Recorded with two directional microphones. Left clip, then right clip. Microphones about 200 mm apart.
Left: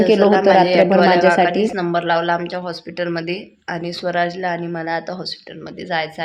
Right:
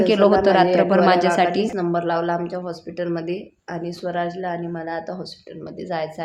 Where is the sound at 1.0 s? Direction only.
10° left (ahead or behind).